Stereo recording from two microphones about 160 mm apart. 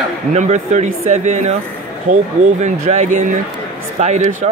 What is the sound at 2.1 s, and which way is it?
Speech, 55° right (ahead or behind).